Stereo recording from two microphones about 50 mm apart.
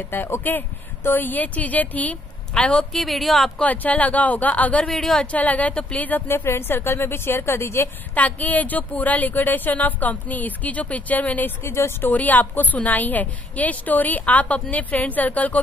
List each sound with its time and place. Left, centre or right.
0.4 s a woman's voice: left
2.9 s speech: centre
3.6 s a woman's voice: left
4.9 s a woman's voice: centre
5.2 s a woman's voice: left
6.2 s a woman's voice: left
8.1 s a woman's voice: left
11.6 s a woman's voice: left
12.1 s a woman's voice: left